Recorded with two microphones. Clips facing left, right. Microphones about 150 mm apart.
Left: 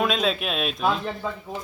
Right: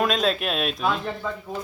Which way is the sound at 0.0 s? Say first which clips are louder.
Right 1 dB; centre (ahead or behind).